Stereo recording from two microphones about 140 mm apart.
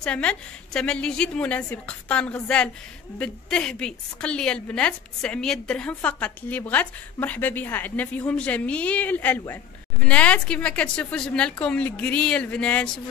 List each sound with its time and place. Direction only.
0.0 s a woman's voice: 5° left (ahead or behind)